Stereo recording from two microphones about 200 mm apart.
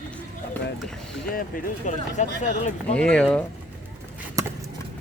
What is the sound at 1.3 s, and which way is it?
Speech, 45° left (ahead or behind).